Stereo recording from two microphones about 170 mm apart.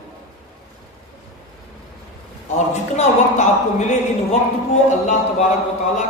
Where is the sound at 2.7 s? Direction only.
45° left (ahead or behind).